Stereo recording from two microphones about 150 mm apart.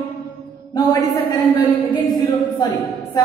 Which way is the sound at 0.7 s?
25° left (ahead or behind).